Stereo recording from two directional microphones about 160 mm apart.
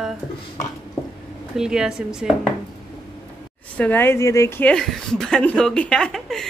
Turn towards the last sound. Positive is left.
turn(degrees=0)  # may be behind; listen again after turning